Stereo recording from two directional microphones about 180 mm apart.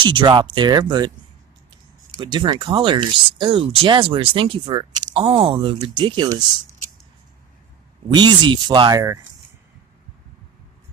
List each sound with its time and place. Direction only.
0.0 s speech: 30° right (ahead or behind)
2.1 s speech: 25° right (ahead or behind)
8.1 s speech: 25° right (ahead or behind)